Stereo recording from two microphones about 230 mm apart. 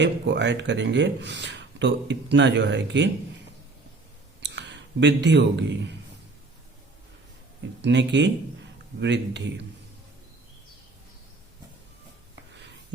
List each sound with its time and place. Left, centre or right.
0.0 s speech: right
4.4 s a man's voice: right
7.8 s speech: right